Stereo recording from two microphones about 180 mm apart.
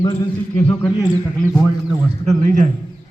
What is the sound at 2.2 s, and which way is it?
Speech, 45° right (ahead or behind).